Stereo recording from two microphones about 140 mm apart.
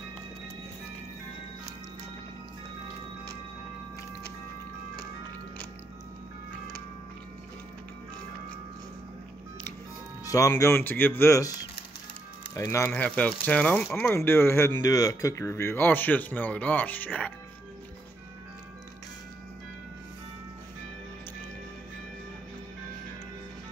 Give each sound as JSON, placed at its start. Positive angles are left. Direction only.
{"t": 10.2, "sound": "speech", "side_deg": 25}
{"t": 12.9, "sound": "speech", "side_deg": 10}